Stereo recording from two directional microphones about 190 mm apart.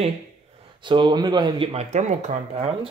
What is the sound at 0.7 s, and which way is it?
Speech, 25° right (ahead or behind).